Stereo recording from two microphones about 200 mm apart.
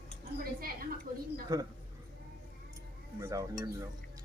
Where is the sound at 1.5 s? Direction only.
20° right (ahead or behind).